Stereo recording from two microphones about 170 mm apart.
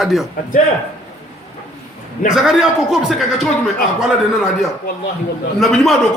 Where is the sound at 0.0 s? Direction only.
Centre (ahead or behind).